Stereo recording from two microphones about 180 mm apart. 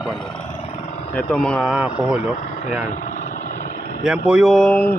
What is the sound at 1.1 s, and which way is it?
Speech, 5° left (ahead or behind).